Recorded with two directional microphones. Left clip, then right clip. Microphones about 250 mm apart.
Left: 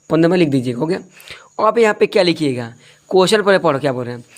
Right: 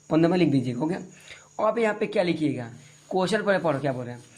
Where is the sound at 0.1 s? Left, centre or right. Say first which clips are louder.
Left 8 dB; left.